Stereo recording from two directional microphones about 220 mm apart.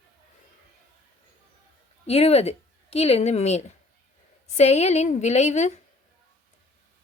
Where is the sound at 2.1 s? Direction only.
30° left (ahead or behind).